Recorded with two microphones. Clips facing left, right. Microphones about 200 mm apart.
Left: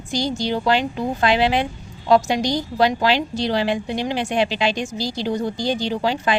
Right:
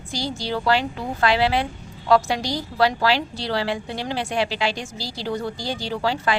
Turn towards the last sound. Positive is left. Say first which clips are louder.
# left 2 dB
turn(degrees=20)  # may be behind; listen again after turning